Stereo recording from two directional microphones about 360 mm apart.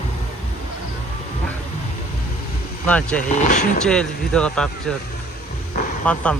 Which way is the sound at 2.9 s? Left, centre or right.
Centre.